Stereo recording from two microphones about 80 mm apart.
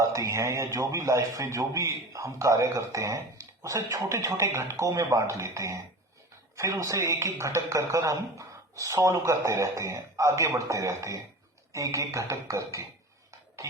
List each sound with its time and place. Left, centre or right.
0.0 s a man's voice: right